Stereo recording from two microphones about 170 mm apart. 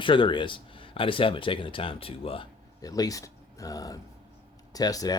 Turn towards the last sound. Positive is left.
turn(degrees=20)  # may be behind; listen again after turning